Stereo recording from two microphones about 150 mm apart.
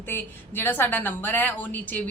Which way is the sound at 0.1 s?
15° left (ahead or behind).